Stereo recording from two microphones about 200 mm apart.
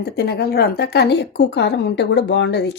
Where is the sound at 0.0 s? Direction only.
50° left (ahead or behind).